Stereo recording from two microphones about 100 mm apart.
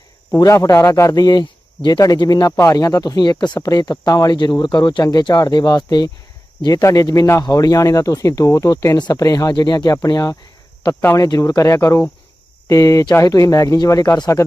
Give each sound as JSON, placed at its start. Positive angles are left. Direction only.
{"t": 0.3, "sound": "speech", "side_deg": 35}